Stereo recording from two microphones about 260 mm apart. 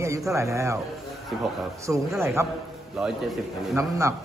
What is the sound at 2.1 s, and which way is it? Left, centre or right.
A man's voice, centre.